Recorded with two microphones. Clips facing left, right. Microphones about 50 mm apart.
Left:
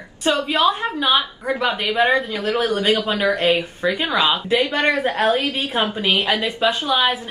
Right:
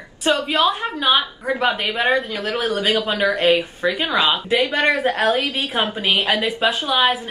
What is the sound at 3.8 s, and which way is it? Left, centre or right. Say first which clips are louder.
Speech: left 1 dB; right.